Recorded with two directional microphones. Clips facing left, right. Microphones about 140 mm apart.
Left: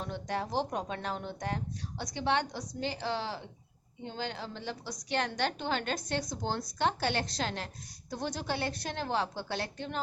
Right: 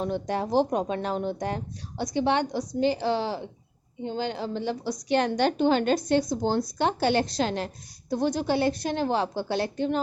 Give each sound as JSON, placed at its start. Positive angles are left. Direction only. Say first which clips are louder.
{"t": 0.0, "sound": "a woman's voice", "louder": "right 8 dB", "side_deg": -10}
{"t": 6.2, "sound": "speech", "louder": "right 10 dB", "side_deg": -35}
{"t": 6.7, "sound": "a woman's voice", "louder": "right 4 dB", "side_deg": -10}